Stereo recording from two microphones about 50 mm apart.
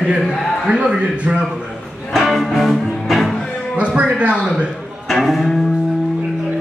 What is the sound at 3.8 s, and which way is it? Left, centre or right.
Music, right.